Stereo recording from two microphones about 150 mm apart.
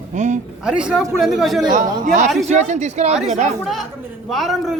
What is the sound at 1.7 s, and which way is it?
Speech, 55° right (ahead or behind).